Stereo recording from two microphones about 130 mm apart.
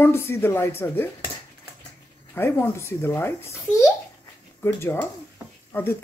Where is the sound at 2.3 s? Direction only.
15° left (ahead or behind).